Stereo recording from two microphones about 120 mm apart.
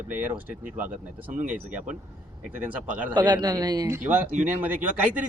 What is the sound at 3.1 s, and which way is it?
Speech, 35° right (ahead or behind).